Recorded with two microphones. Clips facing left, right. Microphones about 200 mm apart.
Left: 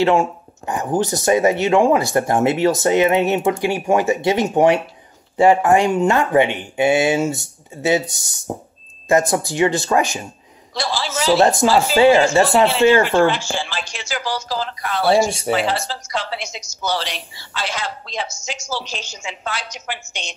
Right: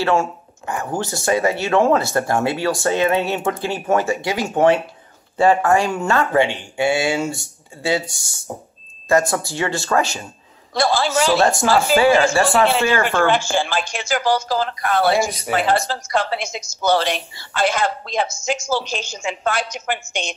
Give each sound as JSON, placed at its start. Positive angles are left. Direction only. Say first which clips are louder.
{"t": 0.0, "sound": "speech", "louder": "left 3 dB", "side_deg": 20}
{"t": 10.7, "sound": "a man's voice", "louder": "right 6 dB", "side_deg": -50}
{"t": 11.3, "sound": "speech", "louder": "left 5 dB", "side_deg": 20}
{"t": 13.3, "sound": "a woman's voice", "louder": "right 5 dB", "side_deg": -50}
{"t": 15.2, "sound": "speech", "louder": "left 5 dB", "side_deg": 30}
{"t": 15.5, "sound": "a woman's voice", "louder": "right 5 dB", "side_deg": -50}